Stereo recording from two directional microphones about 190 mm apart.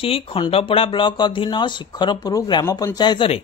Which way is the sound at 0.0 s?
30° left (ahead or behind).